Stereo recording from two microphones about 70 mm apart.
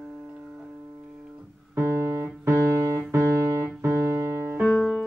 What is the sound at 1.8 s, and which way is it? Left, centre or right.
Music, right.